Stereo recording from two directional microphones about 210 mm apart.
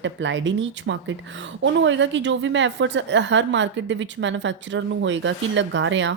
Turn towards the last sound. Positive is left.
turn(degrees=-60)  # may be behind; listen again after turning